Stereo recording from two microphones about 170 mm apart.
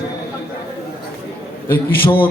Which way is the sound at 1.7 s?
60° left (ahead or behind).